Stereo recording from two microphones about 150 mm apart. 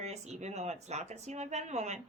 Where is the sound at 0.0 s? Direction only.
45° right (ahead or behind).